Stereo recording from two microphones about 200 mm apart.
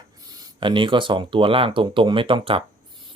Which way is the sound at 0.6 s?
25° right (ahead or behind).